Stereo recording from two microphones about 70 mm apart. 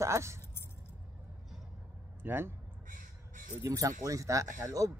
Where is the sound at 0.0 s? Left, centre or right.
Right.